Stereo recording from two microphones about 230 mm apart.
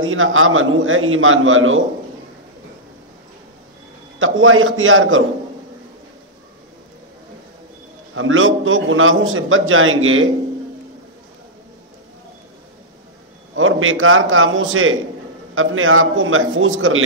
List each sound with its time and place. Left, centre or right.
0.0 s a man's voice: right
4.2 s a man's voice: right
8.1 s a man's voice: right
13.6 s a man's voice: right